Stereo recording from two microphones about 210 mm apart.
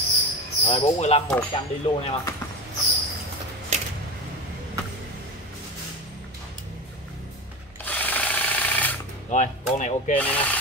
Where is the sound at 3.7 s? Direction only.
30° right (ahead or behind).